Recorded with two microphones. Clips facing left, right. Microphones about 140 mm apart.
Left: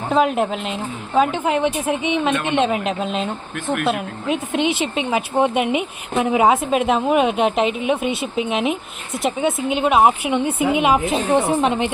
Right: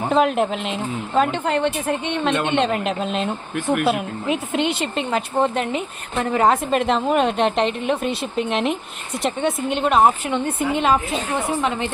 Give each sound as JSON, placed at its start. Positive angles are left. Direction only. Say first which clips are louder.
{"t": 0.1, "sound": "a woman's voice", "louder": "left 1 dB", "side_deg": 0}